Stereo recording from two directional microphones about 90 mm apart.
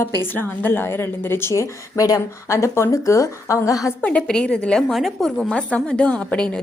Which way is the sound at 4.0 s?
10° left (ahead or behind).